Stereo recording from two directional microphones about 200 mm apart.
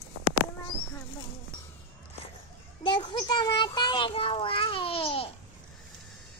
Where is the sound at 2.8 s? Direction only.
25° left (ahead or behind).